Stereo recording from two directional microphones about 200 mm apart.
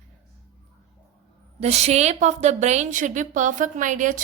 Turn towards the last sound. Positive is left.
turn(degrees=-40)  # may be behind; listen again after turning